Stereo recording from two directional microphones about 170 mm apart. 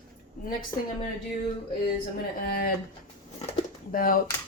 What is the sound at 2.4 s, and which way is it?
Speech, 60° left (ahead or behind).